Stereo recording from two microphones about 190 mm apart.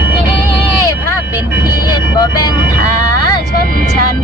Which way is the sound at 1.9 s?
20° left (ahead or behind).